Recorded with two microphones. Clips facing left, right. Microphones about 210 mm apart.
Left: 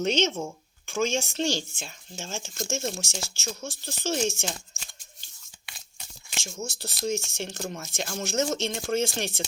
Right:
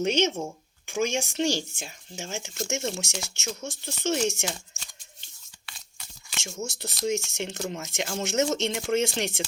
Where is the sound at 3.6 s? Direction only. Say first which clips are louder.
Right 3 dB; 20° right (ahead or behind).